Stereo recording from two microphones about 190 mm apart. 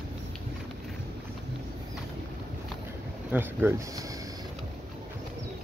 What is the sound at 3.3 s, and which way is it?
Speech, 10° right (ahead or behind).